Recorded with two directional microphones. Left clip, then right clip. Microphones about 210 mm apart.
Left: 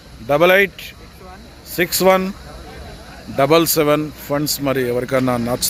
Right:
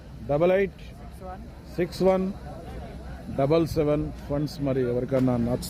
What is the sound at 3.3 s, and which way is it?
Speech, 15° left (ahead or behind).